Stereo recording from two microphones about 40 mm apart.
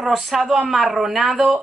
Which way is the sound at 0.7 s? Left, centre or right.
Centre.